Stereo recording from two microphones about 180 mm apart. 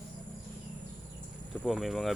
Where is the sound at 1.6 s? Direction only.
Centre (ahead or behind).